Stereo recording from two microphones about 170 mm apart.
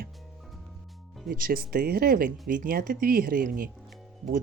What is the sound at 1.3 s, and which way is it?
Speech, 55° right (ahead or behind).